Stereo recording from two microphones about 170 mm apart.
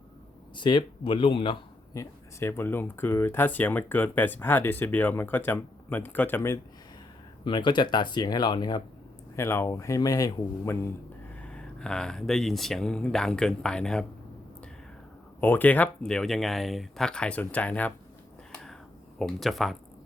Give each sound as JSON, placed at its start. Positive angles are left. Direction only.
{"t": 0.5, "sound": "speech", "side_deg": 25}
{"t": 1.9, "sound": "speech", "side_deg": 15}
{"t": 7.4, "sound": "speech", "side_deg": 25}
{"t": 9.3, "sound": "speech", "side_deg": 15}
{"t": 11.4, "sound": "speech", "side_deg": 5}
{"t": 15.4, "sound": "speech", "side_deg": 10}
{"t": 18.5, "sound": "a sound", "side_deg": 5}
{"t": 19.2, "sound": "speech", "side_deg": 0}